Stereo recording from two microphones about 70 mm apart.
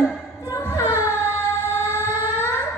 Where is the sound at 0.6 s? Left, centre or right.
Left.